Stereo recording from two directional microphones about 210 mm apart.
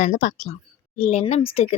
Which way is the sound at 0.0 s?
35° left (ahead or behind).